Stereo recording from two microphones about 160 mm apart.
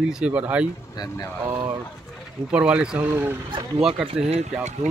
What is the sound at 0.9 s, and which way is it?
Speech, 25° left (ahead or behind).